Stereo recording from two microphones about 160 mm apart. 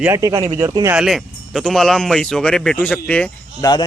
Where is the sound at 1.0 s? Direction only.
Centre (ahead or behind).